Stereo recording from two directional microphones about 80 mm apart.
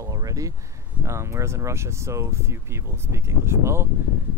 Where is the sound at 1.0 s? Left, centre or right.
Right.